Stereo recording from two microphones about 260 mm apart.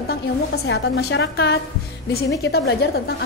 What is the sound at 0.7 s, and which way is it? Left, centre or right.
A woman's voice, left.